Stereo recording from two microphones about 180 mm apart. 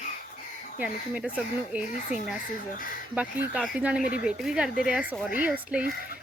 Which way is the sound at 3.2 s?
5° right (ahead or behind).